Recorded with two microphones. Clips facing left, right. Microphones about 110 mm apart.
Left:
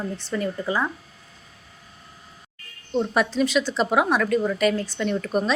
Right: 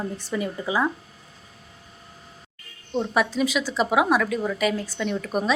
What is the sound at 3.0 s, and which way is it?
A woman's voice, 5° right (ahead or behind).